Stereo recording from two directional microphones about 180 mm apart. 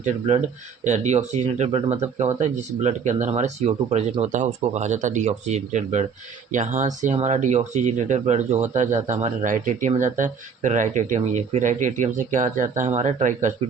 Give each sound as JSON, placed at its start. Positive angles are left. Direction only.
{"t": 0.0, "sound": "speech", "side_deg": -35}